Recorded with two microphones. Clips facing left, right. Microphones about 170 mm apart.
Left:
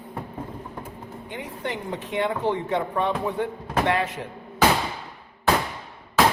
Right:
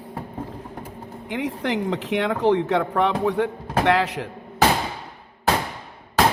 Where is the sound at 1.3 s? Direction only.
80° right.